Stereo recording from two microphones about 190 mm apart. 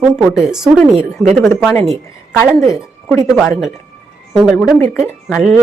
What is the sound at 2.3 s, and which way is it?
Speech, 15° left (ahead or behind).